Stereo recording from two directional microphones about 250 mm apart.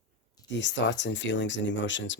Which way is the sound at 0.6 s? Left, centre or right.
Left.